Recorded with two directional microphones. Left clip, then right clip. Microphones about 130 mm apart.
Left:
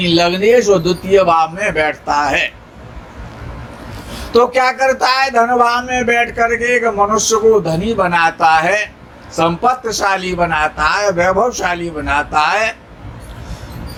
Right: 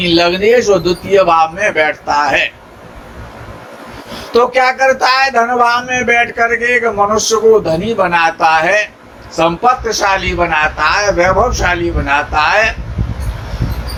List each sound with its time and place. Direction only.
0.0 s a man's voice: 50° left (ahead or behind)
4.3 s speech: 50° left (ahead or behind)